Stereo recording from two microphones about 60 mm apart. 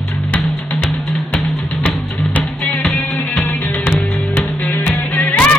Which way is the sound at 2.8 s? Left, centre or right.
Centre.